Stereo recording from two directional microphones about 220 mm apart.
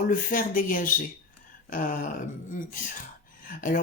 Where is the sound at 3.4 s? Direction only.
40° left (ahead or behind).